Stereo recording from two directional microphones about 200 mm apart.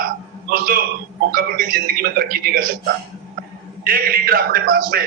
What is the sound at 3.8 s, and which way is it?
A man's voice, 45° right (ahead or behind).